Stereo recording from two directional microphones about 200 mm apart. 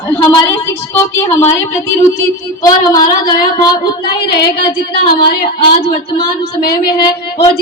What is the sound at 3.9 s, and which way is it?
Child singing, 55° left (ahead or behind).